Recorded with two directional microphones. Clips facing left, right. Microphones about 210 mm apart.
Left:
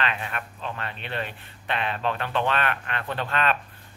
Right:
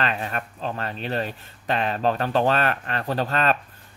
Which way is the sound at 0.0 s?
40° right (ahead or behind).